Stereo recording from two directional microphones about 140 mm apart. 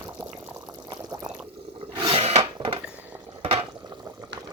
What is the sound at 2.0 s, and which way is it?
Filing, 40° right (ahead or behind).